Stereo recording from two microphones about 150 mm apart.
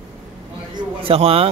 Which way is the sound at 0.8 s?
40° right (ahead or behind).